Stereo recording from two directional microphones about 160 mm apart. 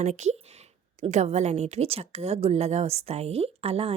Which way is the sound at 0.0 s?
45° right (ahead or behind).